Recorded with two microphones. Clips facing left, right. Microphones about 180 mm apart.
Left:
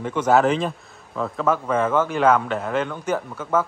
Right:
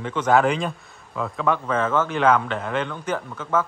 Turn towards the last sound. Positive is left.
turn(degrees=10)  # may be behind; listen again after turning